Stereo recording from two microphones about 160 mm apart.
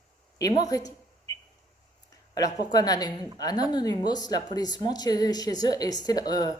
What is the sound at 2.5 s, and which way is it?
A woman's voice, 25° left (ahead or behind).